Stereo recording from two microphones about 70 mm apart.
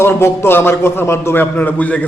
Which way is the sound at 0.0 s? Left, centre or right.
Left.